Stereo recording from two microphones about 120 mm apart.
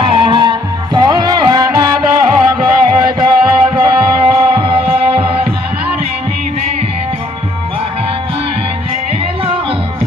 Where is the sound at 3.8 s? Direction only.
45° right (ahead or behind).